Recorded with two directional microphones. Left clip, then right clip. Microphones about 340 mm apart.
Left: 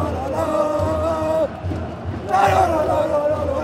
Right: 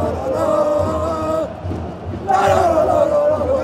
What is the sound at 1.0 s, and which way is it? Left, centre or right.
Music, centre.